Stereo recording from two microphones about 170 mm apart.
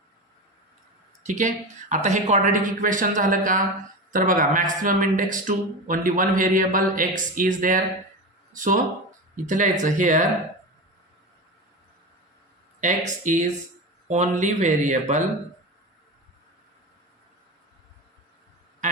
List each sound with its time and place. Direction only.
1.3 s speech: 45° right (ahead or behind)
12.8 s speech: 45° right (ahead or behind)